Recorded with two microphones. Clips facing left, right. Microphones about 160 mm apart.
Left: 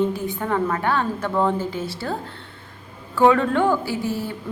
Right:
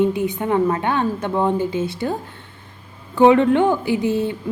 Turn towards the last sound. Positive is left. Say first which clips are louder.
# right 6 dB
turn(degrees=-20)  # may be behind; listen again after turning